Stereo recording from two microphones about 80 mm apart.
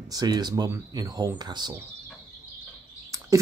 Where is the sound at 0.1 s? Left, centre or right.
Right.